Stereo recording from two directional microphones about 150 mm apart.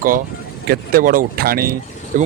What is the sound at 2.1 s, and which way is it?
Speech, 60° right (ahead or behind).